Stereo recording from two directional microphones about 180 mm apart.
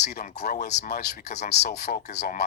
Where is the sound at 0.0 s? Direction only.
65° left (ahead or behind).